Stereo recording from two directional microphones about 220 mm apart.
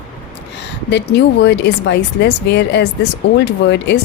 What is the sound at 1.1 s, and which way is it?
Speech, 50° left (ahead or behind).